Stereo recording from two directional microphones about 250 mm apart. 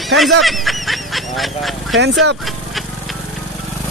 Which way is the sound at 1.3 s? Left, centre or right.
Centre.